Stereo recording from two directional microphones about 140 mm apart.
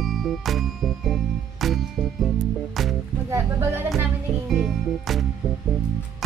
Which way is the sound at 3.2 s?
15° right (ahead or behind).